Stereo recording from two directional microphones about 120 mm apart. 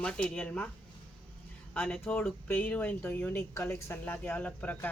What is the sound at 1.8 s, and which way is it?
Speech, 10° left (ahead or behind).